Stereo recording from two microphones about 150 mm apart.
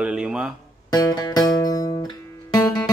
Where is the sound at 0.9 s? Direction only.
25° left (ahead or behind).